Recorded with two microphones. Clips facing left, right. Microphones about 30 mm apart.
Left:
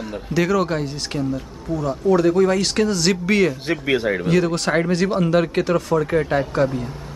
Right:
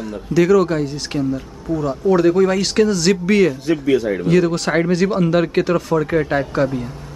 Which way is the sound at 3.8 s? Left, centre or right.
Left.